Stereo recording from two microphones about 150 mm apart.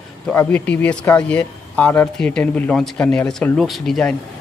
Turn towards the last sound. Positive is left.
turn(degrees=0)  # may be behind; listen again after turning